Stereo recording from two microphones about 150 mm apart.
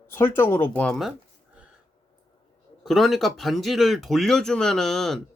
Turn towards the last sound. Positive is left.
turn(degrees=5)  # may be behind; listen again after turning